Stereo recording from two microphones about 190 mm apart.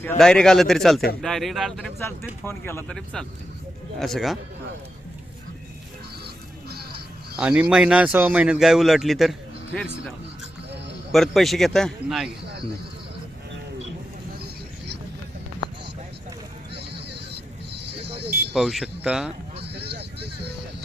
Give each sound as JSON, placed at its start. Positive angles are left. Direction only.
{"t": 0.2, "sound": "speech", "side_deg": 5}
{"t": 2.4, "sound": "speech", "side_deg": 10}
{"t": 7.3, "sound": "speech", "side_deg": -5}
{"t": 11.1, "sound": "speech", "side_deg": 0}
{"t": 17.1, "sound": "a sound", "side_deg": -60}
{"t": 18.5, "sound": "speech", "side_deg": 0}
{"t": 19.6, "sound": "vehicle", "side_deg": -60}